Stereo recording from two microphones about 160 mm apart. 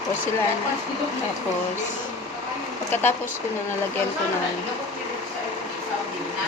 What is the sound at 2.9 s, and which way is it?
Speech, 15° left (ahead or behind).